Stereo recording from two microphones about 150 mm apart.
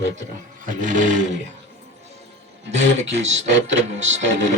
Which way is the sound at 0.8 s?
55° right (ahead or behind).